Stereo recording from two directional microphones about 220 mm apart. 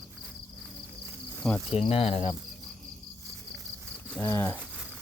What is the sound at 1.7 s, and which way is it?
Cricket, 25° left (ahead or behind).